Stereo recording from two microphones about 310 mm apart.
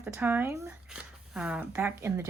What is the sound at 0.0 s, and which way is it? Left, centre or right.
Speech, centre.